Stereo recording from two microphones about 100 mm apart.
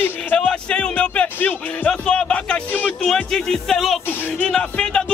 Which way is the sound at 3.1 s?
5° left (ahead or behind).